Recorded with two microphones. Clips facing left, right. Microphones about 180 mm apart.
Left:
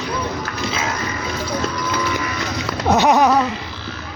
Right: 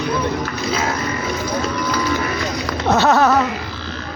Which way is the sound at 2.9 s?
15° left (ahead or behind).